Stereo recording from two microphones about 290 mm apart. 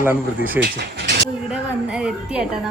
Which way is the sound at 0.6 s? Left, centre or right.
Right.